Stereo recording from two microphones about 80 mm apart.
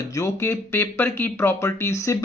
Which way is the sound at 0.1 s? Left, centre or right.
Left.